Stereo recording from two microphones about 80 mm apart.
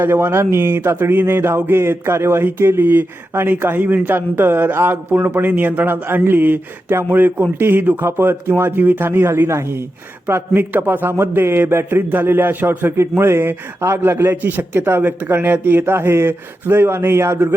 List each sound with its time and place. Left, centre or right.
0.0 s speech: right